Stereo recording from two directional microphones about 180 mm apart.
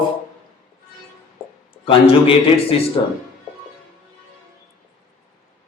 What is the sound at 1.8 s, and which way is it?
A man's voice, 30° left (ahead or behind).